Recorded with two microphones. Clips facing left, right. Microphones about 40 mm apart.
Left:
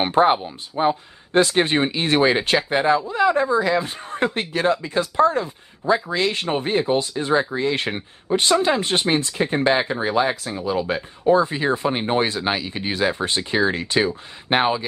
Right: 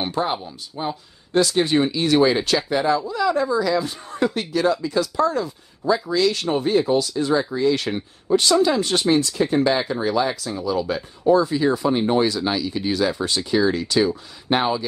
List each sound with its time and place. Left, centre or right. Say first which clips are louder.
0.0 s a woman's voice: left 7 dB; left